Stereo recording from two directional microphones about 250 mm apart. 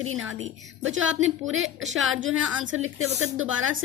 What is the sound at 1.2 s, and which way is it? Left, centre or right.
A woman's voice, right.